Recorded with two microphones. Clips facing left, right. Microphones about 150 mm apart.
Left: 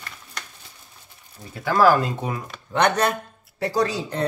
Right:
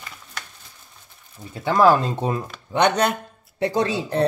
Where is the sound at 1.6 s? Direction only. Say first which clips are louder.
Right 1 dB; 25° right (ahead or behind).